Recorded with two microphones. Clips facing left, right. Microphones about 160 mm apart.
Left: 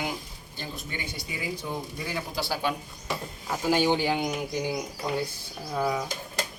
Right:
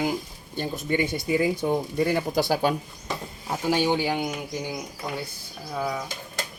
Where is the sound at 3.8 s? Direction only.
15° right (ahead or behind).